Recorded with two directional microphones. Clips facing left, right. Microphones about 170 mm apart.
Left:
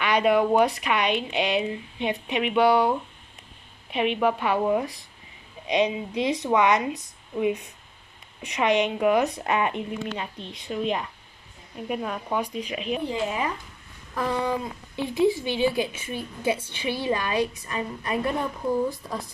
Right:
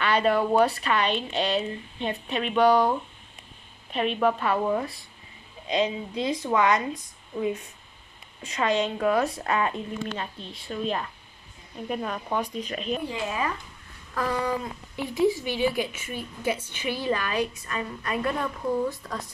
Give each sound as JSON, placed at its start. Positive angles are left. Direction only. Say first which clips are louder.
{"t": 0.0, "sound": "a woman's voice", "louder": "left 2 dB", "side_deg": 15}
{"t": 13.1, "sound": "a woman's voice", "louder": "left 2 dB", "side_deg": 25}